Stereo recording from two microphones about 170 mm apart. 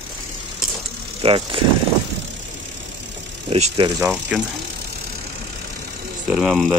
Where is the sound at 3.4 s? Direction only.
35° right (ahead or behind).